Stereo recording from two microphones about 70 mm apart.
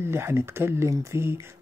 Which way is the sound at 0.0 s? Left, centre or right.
Right.